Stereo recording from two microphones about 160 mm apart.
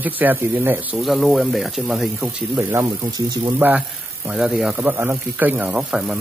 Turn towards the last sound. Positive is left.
turn(degrees=-5)  # may be behind; listen again after turning